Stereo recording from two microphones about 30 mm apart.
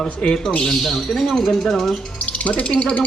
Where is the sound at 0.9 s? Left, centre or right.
Centre.